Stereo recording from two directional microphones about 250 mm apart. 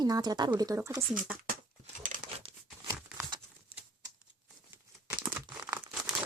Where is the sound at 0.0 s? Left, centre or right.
Centre.